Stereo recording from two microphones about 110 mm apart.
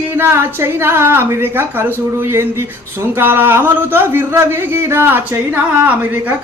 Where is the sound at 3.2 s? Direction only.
20° right (ahead or behind).